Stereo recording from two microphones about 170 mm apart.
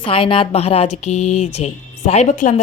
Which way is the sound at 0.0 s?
30° left (ahead or behind).